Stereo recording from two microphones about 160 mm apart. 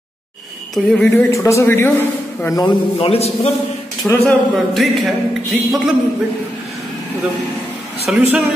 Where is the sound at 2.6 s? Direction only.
35° left (ahead or behind).